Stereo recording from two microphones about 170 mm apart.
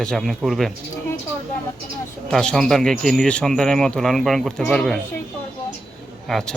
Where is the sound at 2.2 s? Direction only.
5° left (ahead or behind).